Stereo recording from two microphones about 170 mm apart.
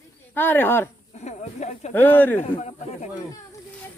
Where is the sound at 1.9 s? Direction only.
10° left (ahead or behind).